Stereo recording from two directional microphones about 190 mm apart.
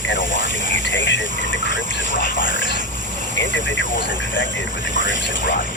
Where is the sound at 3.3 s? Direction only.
75° left (ahead or behind).